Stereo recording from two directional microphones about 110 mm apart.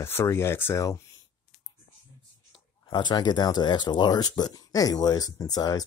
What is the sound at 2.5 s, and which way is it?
Speech, 40° left (ahead or behind).